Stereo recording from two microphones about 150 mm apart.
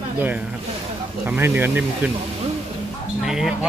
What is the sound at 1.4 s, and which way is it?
Speech, 15° right (ahead or behind).